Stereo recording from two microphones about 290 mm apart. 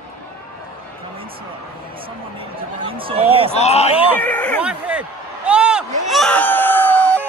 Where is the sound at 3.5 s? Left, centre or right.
Left.